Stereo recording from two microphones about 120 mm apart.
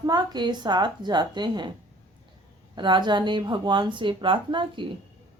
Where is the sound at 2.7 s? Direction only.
40° right (ahead or behind).